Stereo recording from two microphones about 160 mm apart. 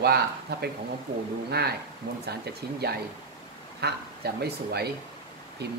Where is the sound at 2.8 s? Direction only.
80° right.